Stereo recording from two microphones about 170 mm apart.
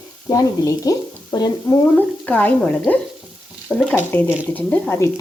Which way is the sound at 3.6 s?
5° left (ahead or behind).